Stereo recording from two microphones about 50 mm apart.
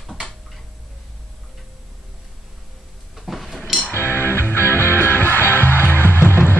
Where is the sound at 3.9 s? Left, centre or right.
Left.